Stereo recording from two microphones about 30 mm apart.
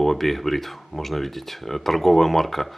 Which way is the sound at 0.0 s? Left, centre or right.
Centre.